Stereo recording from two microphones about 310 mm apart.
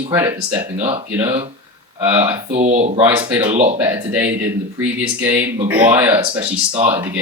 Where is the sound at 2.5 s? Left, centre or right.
Right.